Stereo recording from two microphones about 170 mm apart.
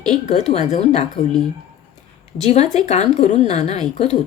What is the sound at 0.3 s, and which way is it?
Speech, 40° left (ahead or behind).